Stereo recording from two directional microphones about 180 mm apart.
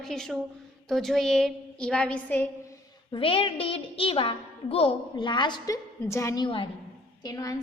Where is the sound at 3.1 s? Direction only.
30° left (ahead or behind).